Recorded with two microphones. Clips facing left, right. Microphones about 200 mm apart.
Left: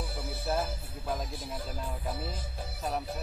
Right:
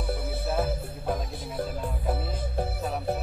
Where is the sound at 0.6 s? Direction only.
55° right (ahead or behind).